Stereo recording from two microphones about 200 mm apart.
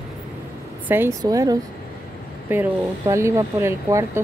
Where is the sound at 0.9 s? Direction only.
10° right (ahead or behind).